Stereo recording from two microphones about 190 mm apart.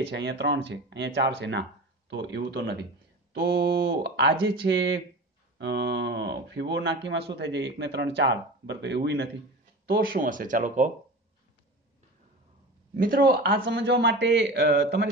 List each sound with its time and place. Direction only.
0.0 s speech: 65° right (ahead or behind)
9.8 s speech: 50° right (ahead or behind)
12.9 s speech: 45° right (ahead or behind); by 15.0 s 65° right (ahead or behind)